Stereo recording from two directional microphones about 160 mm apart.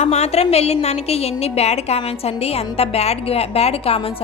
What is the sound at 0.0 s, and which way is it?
A woman's voice, 45° left (ahead or behind).